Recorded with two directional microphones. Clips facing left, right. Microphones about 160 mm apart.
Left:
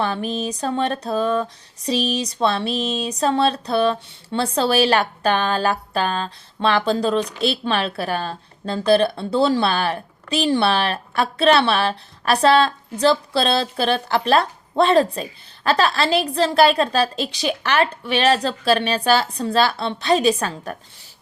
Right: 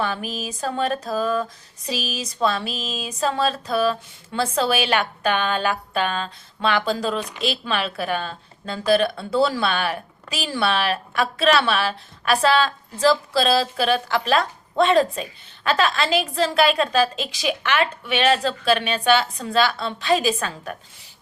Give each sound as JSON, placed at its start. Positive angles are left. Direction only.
{"t": 0.0, "sound": "a woman's voice", "side_deg": 30}
{"t": 2.7, "sound": "a sound", "side_deg": 0}
{"t": 3.0, "sound": "a woman's voice", "side_deg": 35}